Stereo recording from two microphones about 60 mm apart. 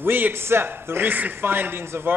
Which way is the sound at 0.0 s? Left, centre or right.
Right.